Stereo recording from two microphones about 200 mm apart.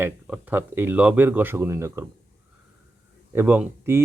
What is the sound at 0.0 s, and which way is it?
Speech, 10° right (ahead or behind).